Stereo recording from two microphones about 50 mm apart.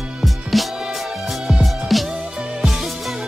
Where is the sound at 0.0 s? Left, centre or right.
Centre.